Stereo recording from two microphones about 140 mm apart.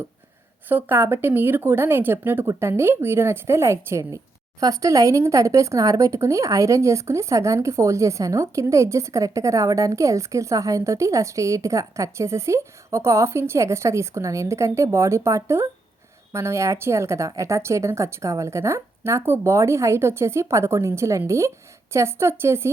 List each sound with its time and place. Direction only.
0.7 s speech: 15° right (ahead or behind)